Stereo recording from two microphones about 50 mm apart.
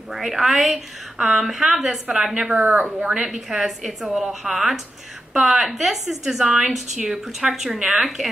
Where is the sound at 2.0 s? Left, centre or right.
Centre.